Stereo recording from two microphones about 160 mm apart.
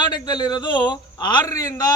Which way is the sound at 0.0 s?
25° left (ahead or behind).